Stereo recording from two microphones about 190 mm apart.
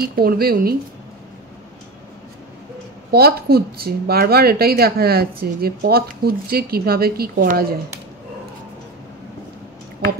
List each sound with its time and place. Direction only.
0.1 s speech: 50° right (ahead or behind)
3.1 s speech: 55° right (ahead or behind)